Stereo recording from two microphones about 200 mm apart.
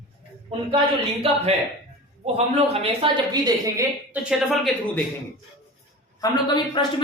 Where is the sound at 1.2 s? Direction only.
30° right (ahead or behind).